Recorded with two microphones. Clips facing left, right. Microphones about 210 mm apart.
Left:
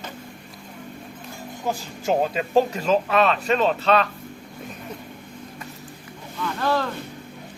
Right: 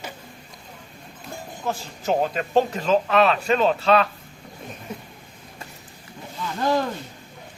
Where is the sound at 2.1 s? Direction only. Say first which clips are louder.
Left 1 dB; 5° left (ahead or behind).